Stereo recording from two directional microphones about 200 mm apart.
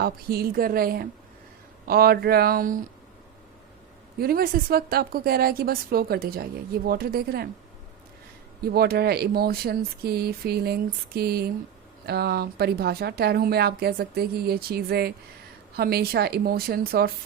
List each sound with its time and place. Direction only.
0.0 s speech: 50° right (ahead or behind)
4.2 s speech: 50° right (ahead or behind)
8.6 s speech: 50° right (ahead or behind)